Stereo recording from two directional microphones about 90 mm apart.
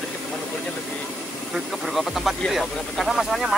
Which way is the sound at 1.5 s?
Centre (ahead or behind).